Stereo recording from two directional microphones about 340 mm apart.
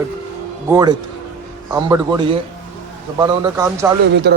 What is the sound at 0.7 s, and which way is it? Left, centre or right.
Speech, centre.